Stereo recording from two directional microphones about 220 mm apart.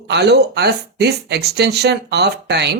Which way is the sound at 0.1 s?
50° right (ahead or behind).